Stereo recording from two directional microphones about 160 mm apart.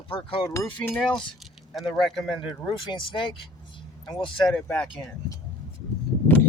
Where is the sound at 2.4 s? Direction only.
30° left (ahead or behind).